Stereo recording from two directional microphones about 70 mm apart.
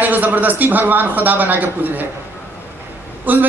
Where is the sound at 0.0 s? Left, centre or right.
Right.